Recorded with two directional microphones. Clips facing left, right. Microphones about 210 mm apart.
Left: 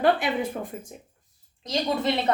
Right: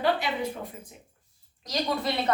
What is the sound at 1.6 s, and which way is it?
Speech, 25° left (ahead or behind).